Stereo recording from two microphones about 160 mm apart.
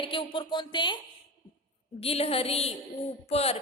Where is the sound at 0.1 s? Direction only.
30° left (ahead or behind).